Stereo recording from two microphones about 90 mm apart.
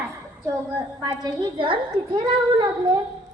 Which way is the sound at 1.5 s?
80° right.